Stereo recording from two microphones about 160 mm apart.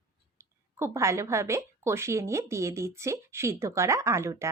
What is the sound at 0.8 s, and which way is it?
A woman's voice, 20° right (ahead or behind).